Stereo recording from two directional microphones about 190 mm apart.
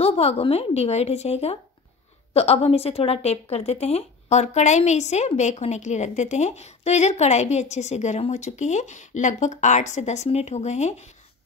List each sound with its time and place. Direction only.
0.0 s a woman's voice: 30° left (ahead or behind)